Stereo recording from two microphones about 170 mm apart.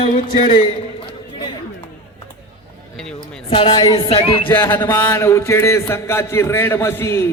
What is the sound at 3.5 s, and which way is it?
Speech, 30° left (ahead or behind).